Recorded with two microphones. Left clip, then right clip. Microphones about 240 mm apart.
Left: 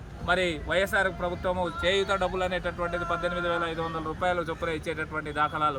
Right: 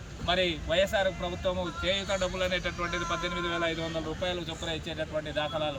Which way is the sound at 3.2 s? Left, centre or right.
Left.